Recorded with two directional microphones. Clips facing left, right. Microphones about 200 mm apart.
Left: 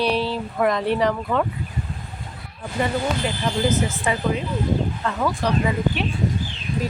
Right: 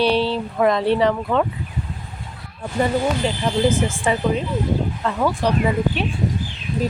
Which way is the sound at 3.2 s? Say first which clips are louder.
Right 3 dB; 30° right (ahead or behind).